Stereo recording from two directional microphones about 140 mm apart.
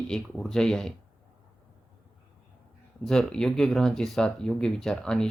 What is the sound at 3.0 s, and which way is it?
Speech, 5° left (ahead or behind).